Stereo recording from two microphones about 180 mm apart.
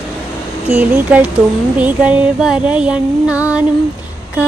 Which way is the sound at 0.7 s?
10° right (ahead or behind).